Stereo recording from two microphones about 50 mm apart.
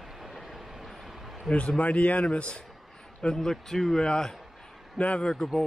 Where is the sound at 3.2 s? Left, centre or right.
Centre.